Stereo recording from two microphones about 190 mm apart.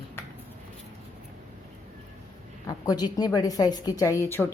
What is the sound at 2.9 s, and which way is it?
A woman's voice, 20° left (ahead or behind).